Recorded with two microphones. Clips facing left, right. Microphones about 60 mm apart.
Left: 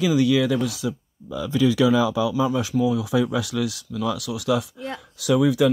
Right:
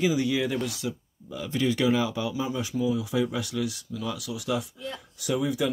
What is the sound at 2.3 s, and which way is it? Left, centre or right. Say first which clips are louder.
Speech: left 7 dB; left.